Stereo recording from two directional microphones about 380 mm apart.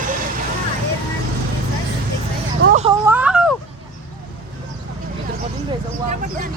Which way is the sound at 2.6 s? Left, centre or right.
Centre.